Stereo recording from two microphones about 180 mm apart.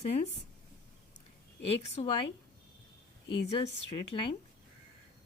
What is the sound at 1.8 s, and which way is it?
Speech, 40° left (ahead or behind).